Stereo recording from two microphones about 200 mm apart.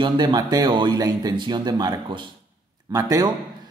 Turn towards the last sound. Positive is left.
turn(degrees=-20)  # may be behind; listen again after turning